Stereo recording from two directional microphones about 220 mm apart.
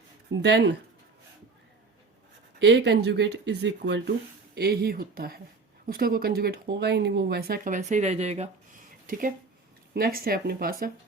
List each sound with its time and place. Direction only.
0.3 s speech: 50° right (ahead or behind)
2.6 s speech: 50° right (ahead or behind); by 8.4 s 30° right (ahead or behind)
9.0 s speech: 40° right (ahead or behind)